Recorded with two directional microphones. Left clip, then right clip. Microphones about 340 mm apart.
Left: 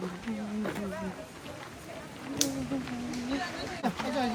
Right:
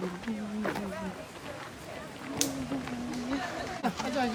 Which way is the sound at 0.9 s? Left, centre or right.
Centre.